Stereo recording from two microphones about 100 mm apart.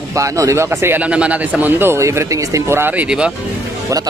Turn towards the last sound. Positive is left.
turn(degrees=-10)  # may be behind; listen again after turning